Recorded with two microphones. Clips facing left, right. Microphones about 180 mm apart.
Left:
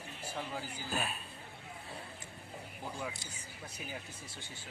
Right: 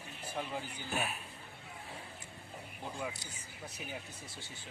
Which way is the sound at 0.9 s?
15° right (ahead or behind).